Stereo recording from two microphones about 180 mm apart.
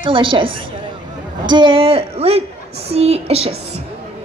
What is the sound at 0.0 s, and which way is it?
A woman's voice, 30° right (ahead or behind).